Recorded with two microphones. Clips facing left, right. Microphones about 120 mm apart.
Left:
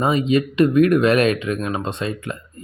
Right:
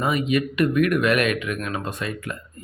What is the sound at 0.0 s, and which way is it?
Speech, 30° left (ahead or behind).